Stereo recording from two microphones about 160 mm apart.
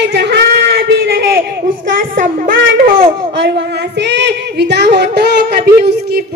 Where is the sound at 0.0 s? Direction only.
90° right.